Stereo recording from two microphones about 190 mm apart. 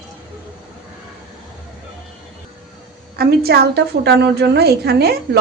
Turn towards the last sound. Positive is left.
turn(degrees=-55)  # may be behind; listen again after turning